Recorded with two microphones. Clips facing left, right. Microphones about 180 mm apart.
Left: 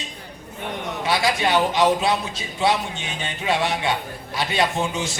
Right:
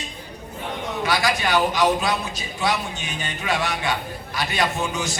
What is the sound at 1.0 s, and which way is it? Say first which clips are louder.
A man's voice: left 2 dB; 25° left (ahead or behind).